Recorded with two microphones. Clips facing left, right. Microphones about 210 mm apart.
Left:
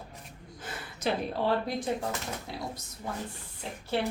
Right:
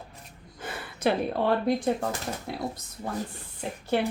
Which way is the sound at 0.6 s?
60° right (ahead or behind).